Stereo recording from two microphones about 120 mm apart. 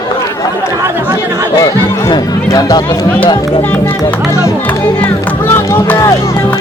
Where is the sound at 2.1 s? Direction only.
30° left (ahead or behind).